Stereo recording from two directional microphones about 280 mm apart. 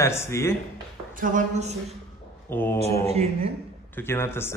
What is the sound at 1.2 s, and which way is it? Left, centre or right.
Speech, right.